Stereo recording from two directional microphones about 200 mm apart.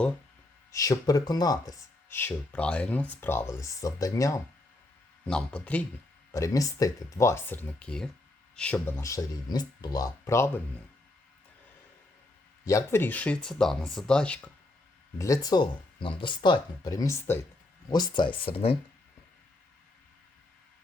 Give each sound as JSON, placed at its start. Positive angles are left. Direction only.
{"t": 0.7, "sound": "speech", "side_deg": 15}
{"t": 5.2, "sound": "speech", "side_deg": 5}
{"t": 12.6, "sound": "speech", "side_deg": 15}
{"t": 15.2, "sound": "speech", "side_deg": 15}